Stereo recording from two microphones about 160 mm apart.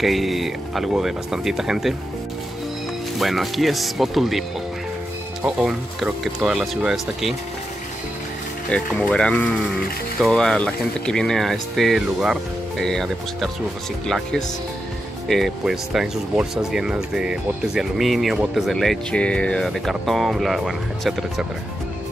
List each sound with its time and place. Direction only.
0.0 s speech: centre (ahead or behind)
3.2 s speech: centre (ahead or behind)
8.6 s speech: 5° left (ahead or behind)